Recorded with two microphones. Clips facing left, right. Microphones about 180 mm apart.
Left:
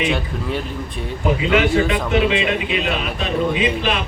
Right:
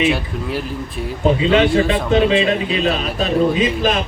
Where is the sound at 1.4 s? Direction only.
30° right (ahead or behind).